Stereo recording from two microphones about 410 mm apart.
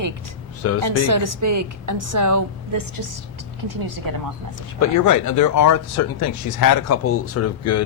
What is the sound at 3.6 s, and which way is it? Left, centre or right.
Speech, right.